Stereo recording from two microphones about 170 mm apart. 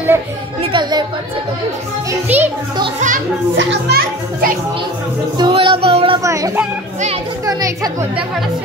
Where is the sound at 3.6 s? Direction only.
75° right (ahead or behind).